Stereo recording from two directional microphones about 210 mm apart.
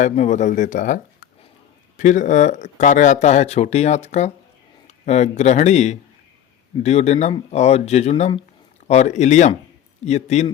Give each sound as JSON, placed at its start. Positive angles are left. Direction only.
{"t": 0.0, "sound": "speech", "side_deg": 35}